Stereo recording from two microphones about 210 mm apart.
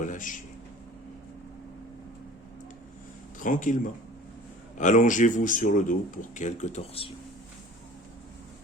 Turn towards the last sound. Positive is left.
turn(degrees=30)  # may be behind; listen again after turning